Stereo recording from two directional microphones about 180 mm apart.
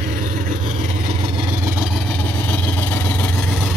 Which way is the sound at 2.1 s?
10° left (ahead or behind).